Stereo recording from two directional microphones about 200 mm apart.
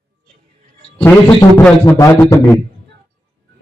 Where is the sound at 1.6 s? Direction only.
15° left (ahead or behind).